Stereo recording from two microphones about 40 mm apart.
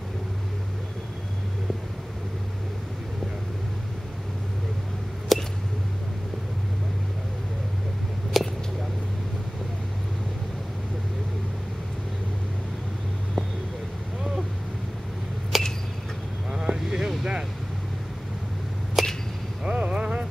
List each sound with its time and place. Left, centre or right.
5.3 s squish: centre
8.3 s a sound: centre
15.5 s a sound: centre
16.5 s vehicle: centre
19.0 s arrow: centre
19.6 s vehicle: right